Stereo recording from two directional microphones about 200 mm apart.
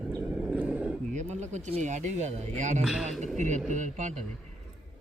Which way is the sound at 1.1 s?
35° right (ahead or behind).